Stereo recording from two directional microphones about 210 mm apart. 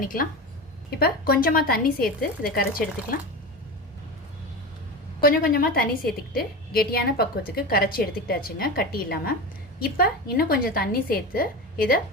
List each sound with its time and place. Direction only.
0.0 s a woman's voice: 40° left (ahead or behind)
5.2 s a woman's voice: 45° left (ahead or behind)